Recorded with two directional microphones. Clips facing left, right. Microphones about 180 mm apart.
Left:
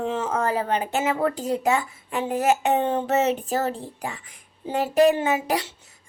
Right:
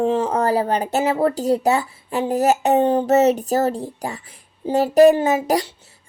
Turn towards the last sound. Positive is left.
turn(degrees=-40)  # may be behind; listen again after turning